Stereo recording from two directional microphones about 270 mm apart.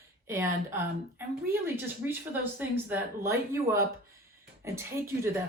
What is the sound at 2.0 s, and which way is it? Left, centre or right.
Speech, centre.